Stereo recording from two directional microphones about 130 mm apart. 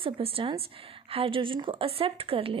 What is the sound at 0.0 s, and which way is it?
A woman's voice, 45° right (ahead or behind).